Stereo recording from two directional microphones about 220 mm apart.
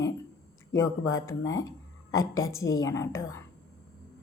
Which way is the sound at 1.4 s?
60° left (ahead or behind).